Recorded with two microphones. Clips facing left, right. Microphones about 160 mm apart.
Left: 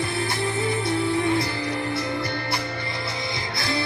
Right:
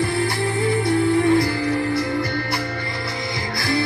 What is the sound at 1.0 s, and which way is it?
Music, 50° right (ahead or behind).